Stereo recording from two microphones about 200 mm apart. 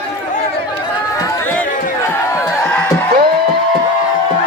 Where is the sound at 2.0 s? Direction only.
15° left (ahead or behind).